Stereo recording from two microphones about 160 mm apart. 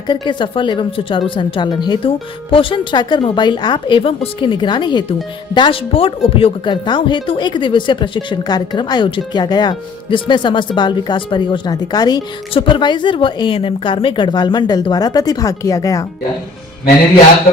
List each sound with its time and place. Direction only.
0.1 s speech: 30° left (ahead or behind)